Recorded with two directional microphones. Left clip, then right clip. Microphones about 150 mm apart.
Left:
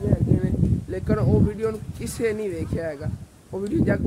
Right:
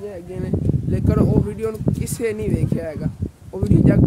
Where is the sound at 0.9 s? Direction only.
15° right (ahead or behind).